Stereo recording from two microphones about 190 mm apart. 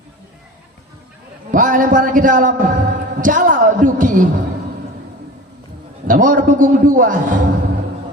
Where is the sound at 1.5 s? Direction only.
45° right (ahead or behind).